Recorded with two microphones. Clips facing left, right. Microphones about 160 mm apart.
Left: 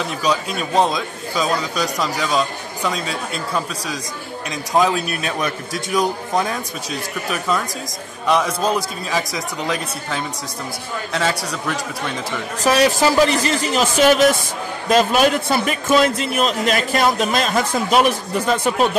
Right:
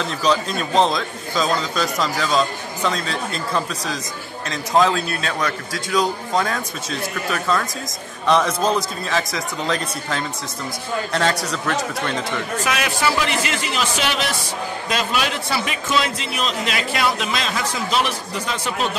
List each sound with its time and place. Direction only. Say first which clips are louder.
0.2 s a man's voice: right 2 dB; 10° left (ahead or behind)
12.6 s a man's voice: left 9 dB; 35° left (ahead or behind)